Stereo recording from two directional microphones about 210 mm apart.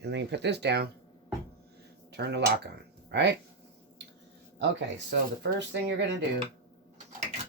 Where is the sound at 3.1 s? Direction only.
55° right (ahead or behind).